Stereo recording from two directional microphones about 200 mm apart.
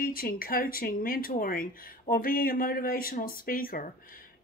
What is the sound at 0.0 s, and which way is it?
Speech, 45° left (ahead or behind).